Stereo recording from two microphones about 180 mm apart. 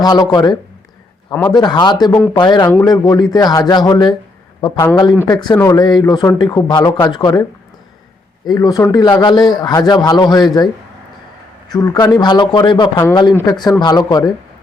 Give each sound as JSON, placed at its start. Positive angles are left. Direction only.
{"t": 0.0, "sound": "a man's voice", "side_deg": 20}
{"t": 5.3, "sound": "a man's voice", "side_deg": 20}
{"t": 8.4, "sound": "a man's voice", "side_deg": 20}
{"t": 11.7, "sound": "a man's voice", "side_deg": 20}